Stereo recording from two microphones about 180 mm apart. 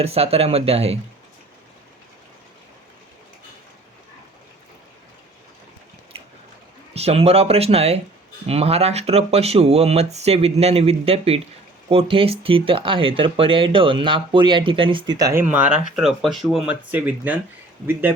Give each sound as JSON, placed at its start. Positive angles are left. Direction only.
{"t": 0.0, "sound": "speech", "side_deg": -35}
{"t": 6.9, "sound": "speech", "side_deg": -35}
{"t": 15.2, "sound": "speech", "side_deg": -15}